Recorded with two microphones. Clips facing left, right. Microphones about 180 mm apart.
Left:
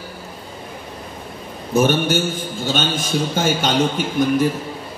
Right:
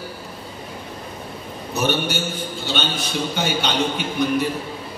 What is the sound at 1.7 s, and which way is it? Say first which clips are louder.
A man's voice: left 6 dB; 50° left (ahead or behind).